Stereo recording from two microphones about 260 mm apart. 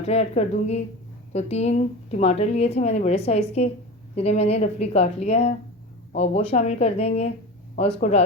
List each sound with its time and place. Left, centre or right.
0.0 s a woman's voice: left